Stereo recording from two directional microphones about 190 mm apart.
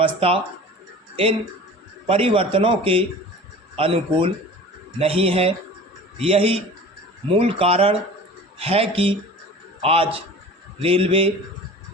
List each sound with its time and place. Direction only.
0.0 s a man's voice: 30° right (ahead or behind)